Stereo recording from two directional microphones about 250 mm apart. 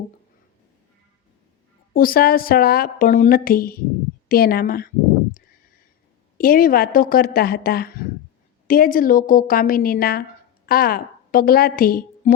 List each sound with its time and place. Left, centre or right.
1.9 s a woman's voice: left
6.3 s a woman's voice: left